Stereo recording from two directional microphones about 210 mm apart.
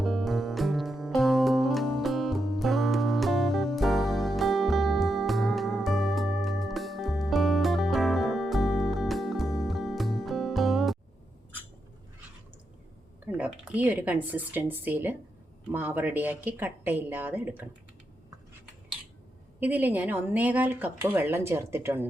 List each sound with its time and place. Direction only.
0.0 s music: centre (ahead or behind)
13.3 s speech: 5° right (ahead or behind)
19.5 s speech: 10° right (ahead or behind)